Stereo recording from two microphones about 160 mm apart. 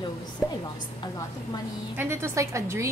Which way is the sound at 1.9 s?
15° right (ahead or behind).